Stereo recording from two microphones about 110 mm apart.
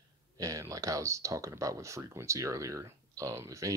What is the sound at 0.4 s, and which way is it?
Speech, 30° right (ahead or behind).